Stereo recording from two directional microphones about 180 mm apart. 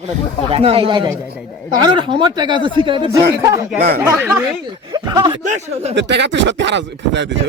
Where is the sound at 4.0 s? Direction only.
15° right (ahead or behind).